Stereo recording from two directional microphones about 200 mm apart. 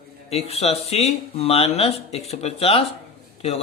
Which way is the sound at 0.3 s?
30° left (ahead or behind).